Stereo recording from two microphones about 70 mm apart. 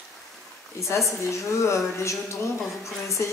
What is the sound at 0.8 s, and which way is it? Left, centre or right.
A woman's voice, left.